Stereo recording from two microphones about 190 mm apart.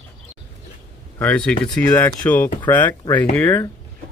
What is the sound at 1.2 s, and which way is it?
Speech, 5° left (ahead or behind).